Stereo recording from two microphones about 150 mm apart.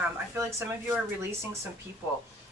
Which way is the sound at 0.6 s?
15° right (ahead or behind).